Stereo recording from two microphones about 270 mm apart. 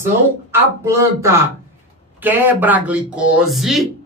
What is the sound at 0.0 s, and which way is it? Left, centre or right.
A woman's voice, centre.